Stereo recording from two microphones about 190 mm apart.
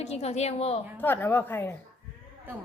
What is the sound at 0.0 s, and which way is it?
Speech, 35° left (ahead or behind).